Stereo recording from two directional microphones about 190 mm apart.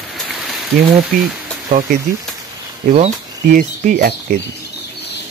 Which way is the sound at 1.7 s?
45° right (ahead or behind).